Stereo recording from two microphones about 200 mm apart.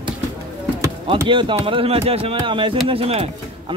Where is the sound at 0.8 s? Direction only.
25° right (ahead or behind).